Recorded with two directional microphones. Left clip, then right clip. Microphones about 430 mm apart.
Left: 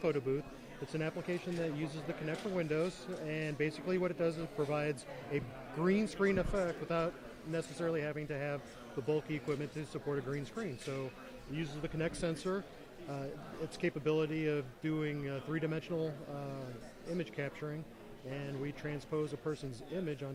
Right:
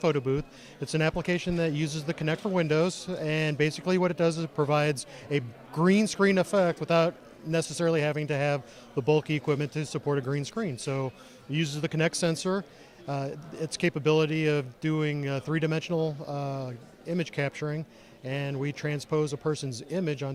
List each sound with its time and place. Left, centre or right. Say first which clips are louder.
0.0 s speech: right 8 dB; right